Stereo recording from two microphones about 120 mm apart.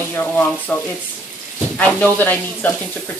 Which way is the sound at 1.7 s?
10° left (ahead or behind).